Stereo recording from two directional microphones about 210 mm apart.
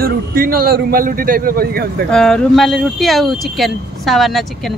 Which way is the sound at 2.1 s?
Centre (ahead or behind).